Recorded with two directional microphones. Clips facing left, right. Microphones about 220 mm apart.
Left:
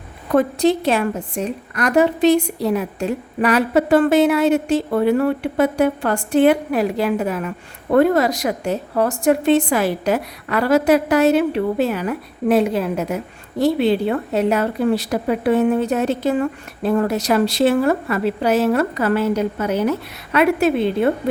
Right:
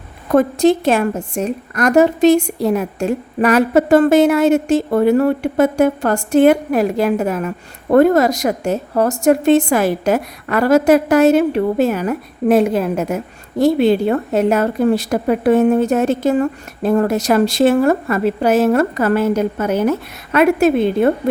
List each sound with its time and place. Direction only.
0.3 s a woman's voice: 45° right (ahead or behind)